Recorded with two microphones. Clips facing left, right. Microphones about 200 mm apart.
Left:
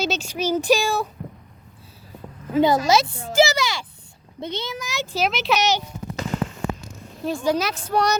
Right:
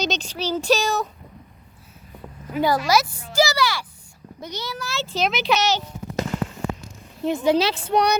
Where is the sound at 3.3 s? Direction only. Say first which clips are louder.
Left 2 dB; 20° left (ahead or behind).